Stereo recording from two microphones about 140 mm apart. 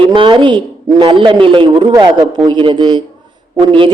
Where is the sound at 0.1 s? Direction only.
35° right (ahead or behind).